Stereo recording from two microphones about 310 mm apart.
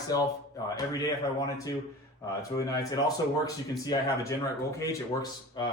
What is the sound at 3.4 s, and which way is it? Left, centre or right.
Speech, centre.